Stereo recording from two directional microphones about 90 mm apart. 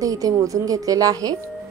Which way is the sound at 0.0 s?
40° right (ahead or behind).